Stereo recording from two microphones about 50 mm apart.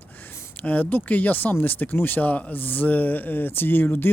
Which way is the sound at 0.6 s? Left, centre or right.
Left.